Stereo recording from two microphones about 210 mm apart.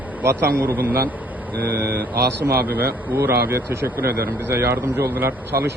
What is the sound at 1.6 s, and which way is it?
A man's voice, 10° right (ahead or behind).